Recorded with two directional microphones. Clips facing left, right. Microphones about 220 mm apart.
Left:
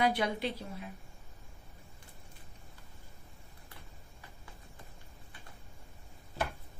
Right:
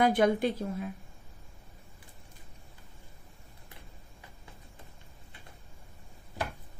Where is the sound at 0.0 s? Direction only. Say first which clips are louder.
Right 6 dB; 50° right (ahead or behind).